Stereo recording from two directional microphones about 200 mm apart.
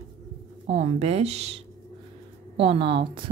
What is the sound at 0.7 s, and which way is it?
A woman's voice, 35° right (ahead or behind).